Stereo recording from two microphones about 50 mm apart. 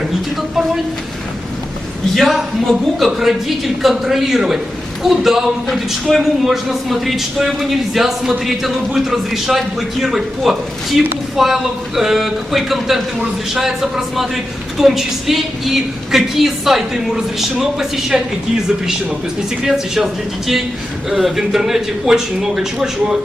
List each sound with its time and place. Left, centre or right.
2.1 s a woman's voice: centre
21.1 s a woman's voice: centre